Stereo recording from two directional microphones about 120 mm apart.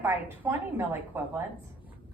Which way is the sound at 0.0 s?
15° right (ahead or behind).